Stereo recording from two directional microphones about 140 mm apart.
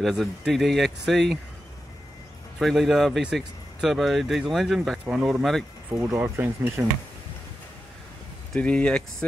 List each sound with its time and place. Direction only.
0.0 s speech: centre (ahead or behind)
2.6 s speech: centre (ahead or behind)
5.9 s speech: 15° right (ahead or behind)
8.5 s speech: 10° left (ahead or behind)